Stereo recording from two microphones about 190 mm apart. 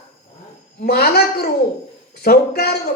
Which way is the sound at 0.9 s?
55° left (ahead or behind).